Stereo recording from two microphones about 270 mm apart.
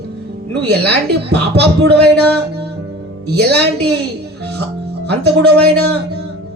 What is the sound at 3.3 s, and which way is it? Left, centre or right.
Speech, right.